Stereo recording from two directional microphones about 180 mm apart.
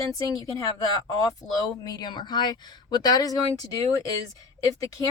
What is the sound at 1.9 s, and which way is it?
A woman's voice, 20° left (ahead or behind).